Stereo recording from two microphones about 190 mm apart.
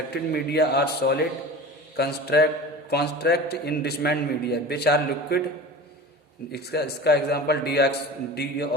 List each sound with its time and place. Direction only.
0.1 s a man's voice: 60° left (ahead or behind)
6.5 s a man's voice: 60° left (ahead or behind)